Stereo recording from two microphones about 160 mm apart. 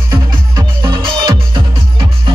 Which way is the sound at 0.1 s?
20° right (ahead or behind).